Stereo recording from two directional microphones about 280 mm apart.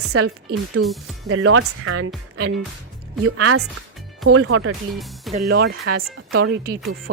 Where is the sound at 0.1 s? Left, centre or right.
Right.